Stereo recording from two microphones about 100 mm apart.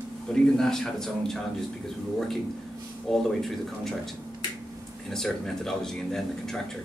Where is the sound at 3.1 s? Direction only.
5° left (ahead or behind).